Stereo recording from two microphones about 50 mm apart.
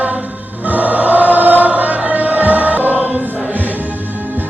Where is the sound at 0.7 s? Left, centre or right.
Right.